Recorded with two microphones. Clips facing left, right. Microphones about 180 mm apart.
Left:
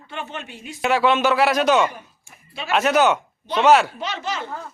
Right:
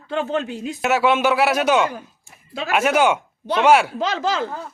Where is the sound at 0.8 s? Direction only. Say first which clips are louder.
Even; 10° right (ahead or behind).